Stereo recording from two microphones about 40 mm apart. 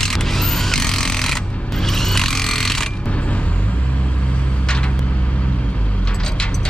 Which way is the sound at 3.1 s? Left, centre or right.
Left.